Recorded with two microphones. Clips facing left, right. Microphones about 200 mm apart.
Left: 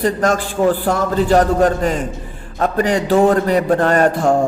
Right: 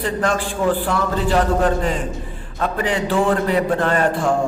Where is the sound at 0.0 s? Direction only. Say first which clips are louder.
Left 4 dB; 40° left (ahead or behind).